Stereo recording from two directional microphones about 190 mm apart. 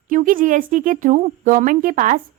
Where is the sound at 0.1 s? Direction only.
45° right (ahead or behind).